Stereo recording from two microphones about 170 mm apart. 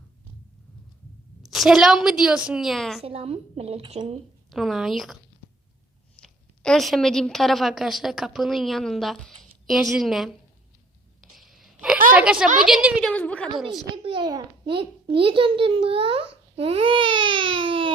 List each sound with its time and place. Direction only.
1.4 s a woman's voice: centre (ahead or behind)
3.0 s a child's voice: 35° right (ahead or behind)
4.5 s a woman's voice: centre (ahead or behind)
6.1 s a woman's voice: 5° left (ahead or behind)
11.2 s sneeze: centre (ahead or behind)
12.1 s a woman's voice: 5° right (ahead or behind)
13.0 s a woman's voice: 5° left (ahead or behind)
13.9 s a child's voice: 30° right (ahead or behind)